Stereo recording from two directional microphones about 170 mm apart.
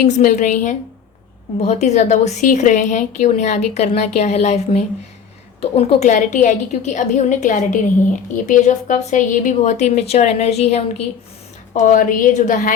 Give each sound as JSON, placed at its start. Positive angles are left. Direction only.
{"t": 0.0, "sound": "a woman's voice", "side_deg": 50}